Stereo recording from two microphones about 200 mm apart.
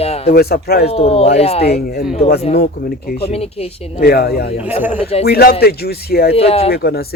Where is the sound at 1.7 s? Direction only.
50° left (ahead or behind).